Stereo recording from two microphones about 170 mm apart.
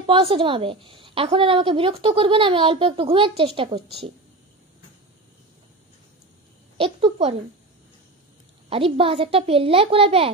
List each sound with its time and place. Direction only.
0.0 s a woman's voice: 30° right (ahead or behind)
6.8 s a woman's voice: 35° right (ahead or behind)
8.6 s a woman's voice: 35° right (ahead or behind)